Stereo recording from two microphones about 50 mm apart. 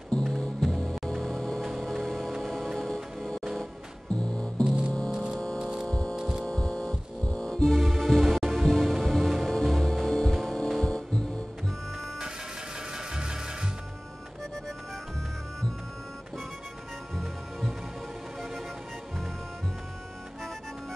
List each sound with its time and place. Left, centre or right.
0.1 s music: centre
1.6 s music: centre
4.1 s music: left
4.6 s music: right
5.9 s hum: centre
6.1 s a sound: centre
6.4 s music: centre
7.7 s music: centre
10.8 s music: centre
12.9 s music: centre
17.1 s music: centre